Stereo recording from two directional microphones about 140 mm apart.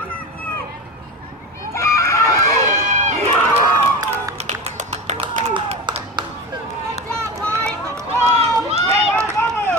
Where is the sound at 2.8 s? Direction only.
60° right (ahead or behind).